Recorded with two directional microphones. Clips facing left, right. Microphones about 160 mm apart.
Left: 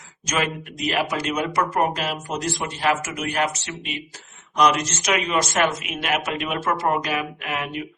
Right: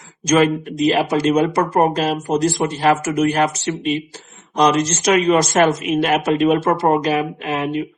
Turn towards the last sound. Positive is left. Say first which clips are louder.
# right 8 dB
turn(degrees=-30)  # may be behind; listen again after turning